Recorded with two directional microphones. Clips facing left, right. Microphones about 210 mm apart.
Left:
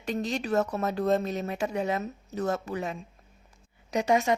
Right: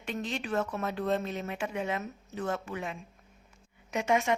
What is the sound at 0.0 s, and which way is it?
Speech, 40° left (ahead or behind).